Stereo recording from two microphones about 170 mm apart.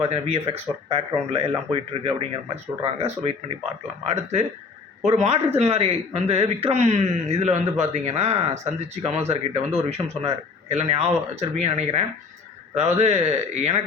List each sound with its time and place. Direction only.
0.1 s a man's voice: 35° right (ahead or behind)